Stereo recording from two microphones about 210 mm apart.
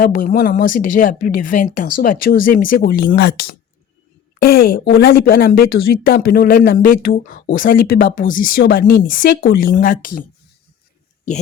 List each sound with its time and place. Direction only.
0.0 s a woman's voice: 40° left (ahead or behind)